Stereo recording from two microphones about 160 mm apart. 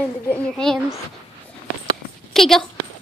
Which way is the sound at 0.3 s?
5° left (ahead or behind).